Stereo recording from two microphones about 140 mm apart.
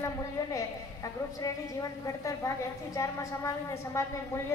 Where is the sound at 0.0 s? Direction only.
25° left (ahead or behind).